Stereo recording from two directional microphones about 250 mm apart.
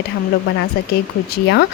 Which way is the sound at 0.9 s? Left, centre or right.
Left.